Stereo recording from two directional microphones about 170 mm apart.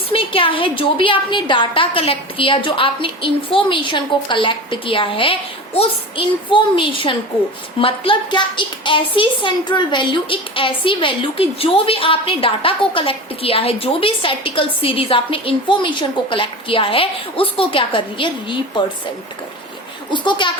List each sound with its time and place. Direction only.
0.1 s a child's voice: 30° left (ahead or behind)
20.1 s a child's voice: 25° left (ahead or behind)